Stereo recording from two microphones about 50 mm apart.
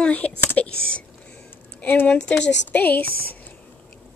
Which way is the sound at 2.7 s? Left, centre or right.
Left.